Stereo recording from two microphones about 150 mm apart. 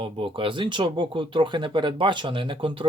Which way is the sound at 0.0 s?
35° right (ahead or behind).